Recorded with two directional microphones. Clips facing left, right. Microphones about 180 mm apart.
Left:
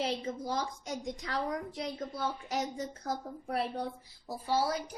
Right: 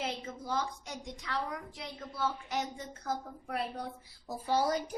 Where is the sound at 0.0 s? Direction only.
35° left (ahead or behind).